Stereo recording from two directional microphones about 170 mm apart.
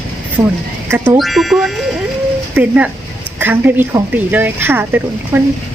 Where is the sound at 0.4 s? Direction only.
15° right (ahead or behind).